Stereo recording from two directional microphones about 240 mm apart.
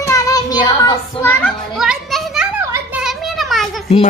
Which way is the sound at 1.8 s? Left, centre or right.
Centre.